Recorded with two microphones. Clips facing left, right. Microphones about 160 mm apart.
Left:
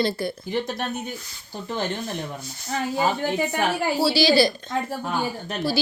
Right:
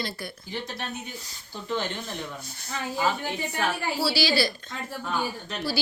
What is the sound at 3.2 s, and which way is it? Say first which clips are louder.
Speech: left 8 dB; 90° left.